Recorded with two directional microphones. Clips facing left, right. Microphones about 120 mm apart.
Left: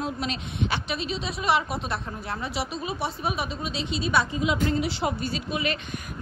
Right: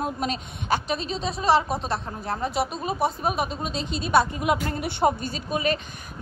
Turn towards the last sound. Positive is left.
turn(degrees=-40)  # may be behind; listen again after turning